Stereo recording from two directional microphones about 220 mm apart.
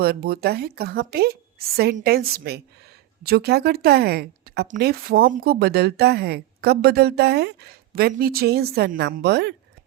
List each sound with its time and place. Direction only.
0.0 s speech: 45° right (ahead or behind)